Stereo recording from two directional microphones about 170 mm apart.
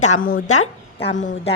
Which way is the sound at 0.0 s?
50° left (ahead or behind).